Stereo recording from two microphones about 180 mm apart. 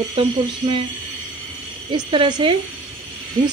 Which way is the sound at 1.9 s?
25° right (ahead or behind).